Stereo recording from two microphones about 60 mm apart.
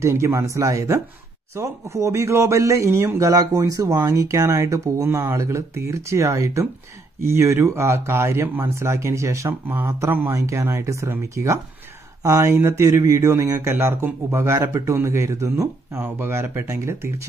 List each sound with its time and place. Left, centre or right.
0.0 s speech: right
3.3 s speech: right
9.5 s speech: right
9.8 s speech: right
12.2 s speech: right
12.4 s speech: right
13.7 s speech: right
14.6 s speech: right
15.9 s speech: right